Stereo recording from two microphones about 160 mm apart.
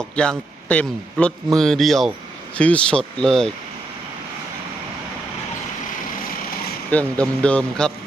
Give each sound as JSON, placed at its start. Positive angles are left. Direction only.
{"t": 0.2, "sound": "a man's voice", "side_deg": 5}
{"t": 6.9, "sound": "a man's voice", "side_deg": 5}